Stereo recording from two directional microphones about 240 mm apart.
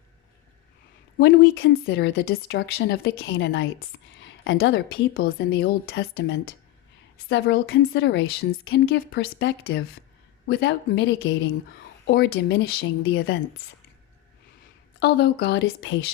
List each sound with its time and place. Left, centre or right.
1.2 s speech: left
6.0 s speech: left
7.3 s speech: left
14.9 s speech: left